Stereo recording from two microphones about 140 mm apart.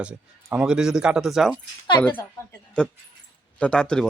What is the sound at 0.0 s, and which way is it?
Speech, 10° right (ahead or behind).